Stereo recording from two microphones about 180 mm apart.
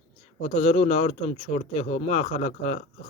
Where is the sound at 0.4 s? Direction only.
40° left (ahead or behind).